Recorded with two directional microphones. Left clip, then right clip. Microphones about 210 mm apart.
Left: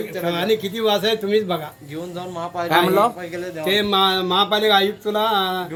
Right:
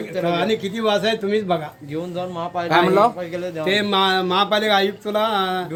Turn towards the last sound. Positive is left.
turn(degrees=-5)  # may be behind; listen again after turning